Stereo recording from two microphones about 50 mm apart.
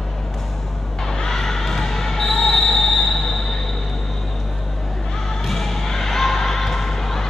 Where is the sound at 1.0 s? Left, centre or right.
Centre.